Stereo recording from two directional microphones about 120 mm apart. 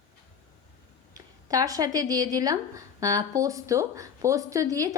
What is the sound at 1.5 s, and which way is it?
A woman's voice, 30° right (ahead or behind).